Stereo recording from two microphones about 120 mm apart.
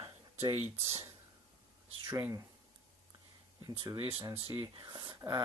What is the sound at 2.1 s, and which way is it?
Speech, 20° right (ahead or behind).